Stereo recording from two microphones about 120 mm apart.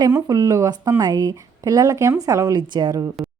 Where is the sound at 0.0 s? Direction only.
30° right (ahead or behind).